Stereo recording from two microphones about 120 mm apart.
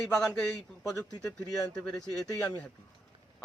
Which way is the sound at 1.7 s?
5° left (ahead or behind).